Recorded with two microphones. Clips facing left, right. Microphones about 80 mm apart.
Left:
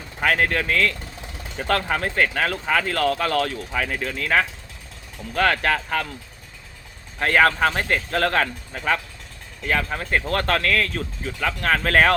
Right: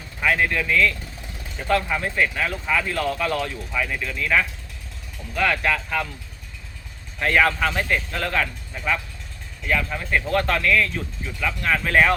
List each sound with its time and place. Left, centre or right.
0.2 s speech: left
1.6 s speech: left
3.7 s speech: left
7.2 s speech: left